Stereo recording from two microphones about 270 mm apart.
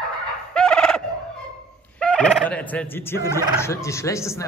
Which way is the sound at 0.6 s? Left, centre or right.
Centre.